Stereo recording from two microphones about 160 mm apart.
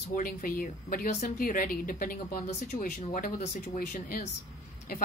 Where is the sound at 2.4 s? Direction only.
45° left (ahead or behind).